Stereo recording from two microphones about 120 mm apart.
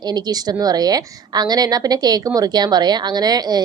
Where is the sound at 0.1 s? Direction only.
35° right (ahead or behind).